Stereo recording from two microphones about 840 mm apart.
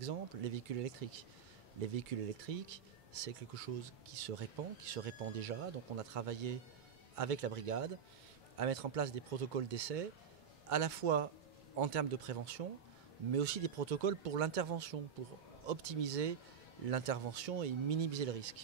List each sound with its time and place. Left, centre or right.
0.0 s speech: right